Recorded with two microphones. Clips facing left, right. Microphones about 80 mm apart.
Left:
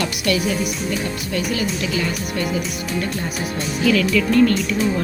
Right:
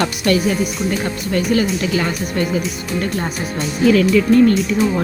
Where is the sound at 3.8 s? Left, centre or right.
Right.